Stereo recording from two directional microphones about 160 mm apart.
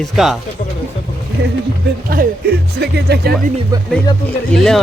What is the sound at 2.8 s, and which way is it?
Speech, 90° right.